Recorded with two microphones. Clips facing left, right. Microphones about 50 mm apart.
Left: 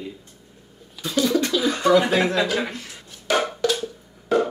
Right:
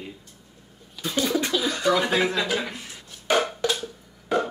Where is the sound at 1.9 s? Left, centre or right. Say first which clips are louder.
Left 4 dB; centre.